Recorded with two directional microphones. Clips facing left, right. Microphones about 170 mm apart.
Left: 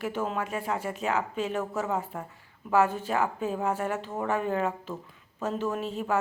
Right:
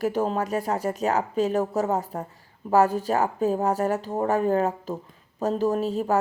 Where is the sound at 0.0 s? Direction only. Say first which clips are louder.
Right 6 dB; 35° right (ahead or behind).